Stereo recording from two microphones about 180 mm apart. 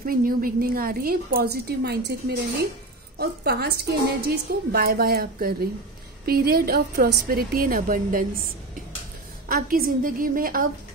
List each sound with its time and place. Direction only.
0.0 s a woman's voice: 55° right (ahead or behind)
9.5 s a woman's voice: 55° right (ahead or behind)